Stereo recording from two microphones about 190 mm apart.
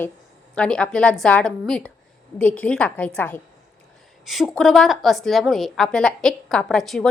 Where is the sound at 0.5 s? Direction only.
5° left (ahead or behind).